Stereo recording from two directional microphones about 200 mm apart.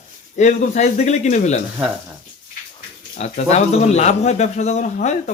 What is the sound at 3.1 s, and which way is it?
Speech, 35° left (ahead or behind).